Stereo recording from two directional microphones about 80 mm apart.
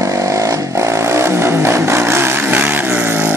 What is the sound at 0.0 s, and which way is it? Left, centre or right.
Vehicle, right.